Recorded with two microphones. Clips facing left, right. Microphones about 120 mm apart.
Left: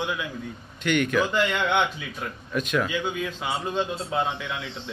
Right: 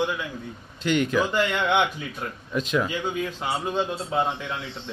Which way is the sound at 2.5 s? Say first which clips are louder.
Right 1 dB; 20° right (ahead or behind).